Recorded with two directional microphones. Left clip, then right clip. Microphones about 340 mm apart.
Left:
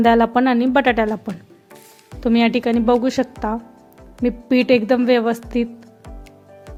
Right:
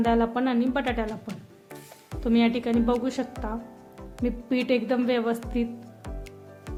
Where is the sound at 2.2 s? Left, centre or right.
Centre.